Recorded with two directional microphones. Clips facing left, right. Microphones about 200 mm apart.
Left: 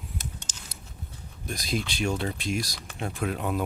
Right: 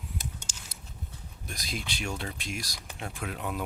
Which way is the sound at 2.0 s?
35° left (ahead or behind).